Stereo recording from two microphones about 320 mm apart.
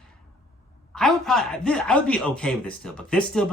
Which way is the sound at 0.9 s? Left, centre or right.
Centre.